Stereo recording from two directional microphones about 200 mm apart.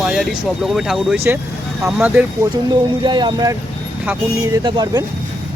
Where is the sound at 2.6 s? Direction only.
20° right (ahead or behind).